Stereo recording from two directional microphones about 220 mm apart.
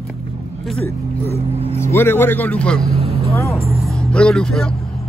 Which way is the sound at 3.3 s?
10° left (ahead or behind).